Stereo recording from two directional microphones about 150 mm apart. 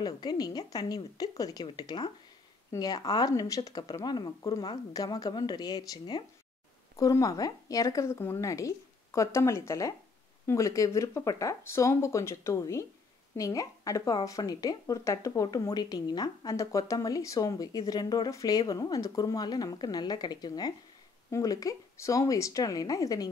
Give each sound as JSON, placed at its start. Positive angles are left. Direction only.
{"t": 0.0, "sound": "a woman's voice", "side_deg": 25}